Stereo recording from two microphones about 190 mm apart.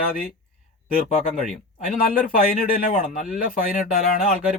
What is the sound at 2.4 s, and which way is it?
Speech, 50° left (ahead or behind).